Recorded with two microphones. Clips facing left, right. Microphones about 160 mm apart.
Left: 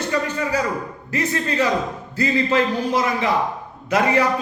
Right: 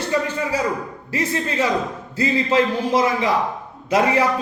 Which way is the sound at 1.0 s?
30° right (ahead or behind).